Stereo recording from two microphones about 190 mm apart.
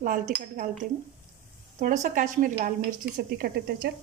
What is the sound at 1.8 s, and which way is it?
A woman's voice, 40° right (ahead or behind).